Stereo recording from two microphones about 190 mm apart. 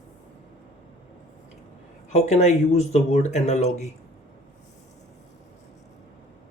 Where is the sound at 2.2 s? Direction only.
40° left (ahead or behind).